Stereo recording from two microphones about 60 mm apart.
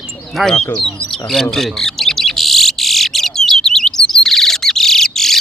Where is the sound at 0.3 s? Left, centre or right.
Centre.